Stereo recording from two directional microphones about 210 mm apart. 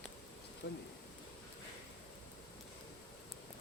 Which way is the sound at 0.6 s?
55° left (ahead or behind).